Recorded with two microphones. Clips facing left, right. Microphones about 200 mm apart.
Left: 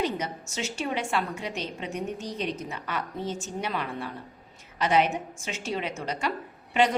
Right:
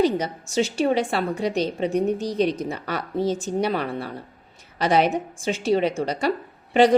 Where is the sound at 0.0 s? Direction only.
35° right (ahead or behind).